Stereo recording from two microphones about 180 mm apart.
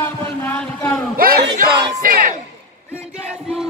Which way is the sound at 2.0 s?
50° right (ahead or behind).